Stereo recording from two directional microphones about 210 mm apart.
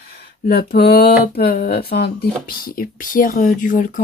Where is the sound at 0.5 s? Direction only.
50° left (ahead or behind).